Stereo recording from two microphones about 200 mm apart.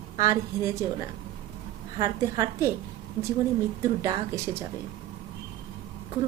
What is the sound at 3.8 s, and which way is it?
Speech, 15° right (ahead or behind).